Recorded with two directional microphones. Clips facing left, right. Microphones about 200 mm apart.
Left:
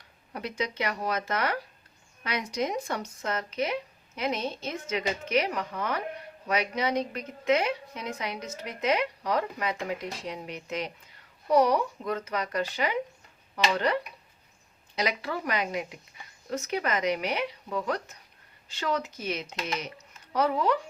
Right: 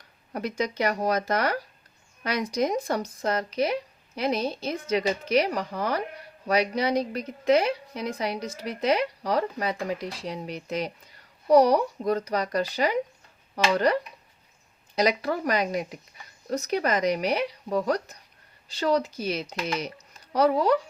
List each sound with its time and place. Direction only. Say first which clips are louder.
0.3 s a woman's voice: right 4 dB; 40° right (ahead or behind)